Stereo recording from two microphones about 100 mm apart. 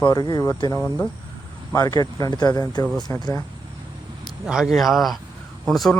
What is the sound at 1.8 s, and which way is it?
Speech, 40° left (ahead or behind).